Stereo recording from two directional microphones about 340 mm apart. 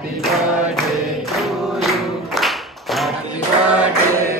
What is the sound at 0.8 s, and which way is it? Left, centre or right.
Choir, centre.